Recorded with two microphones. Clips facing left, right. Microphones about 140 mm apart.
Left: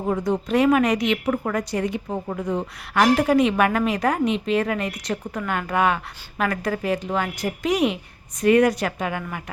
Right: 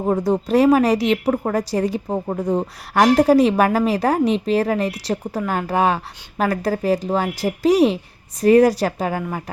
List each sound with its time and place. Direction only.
0.0 s a woman's voice: 35° right (ahead or behind)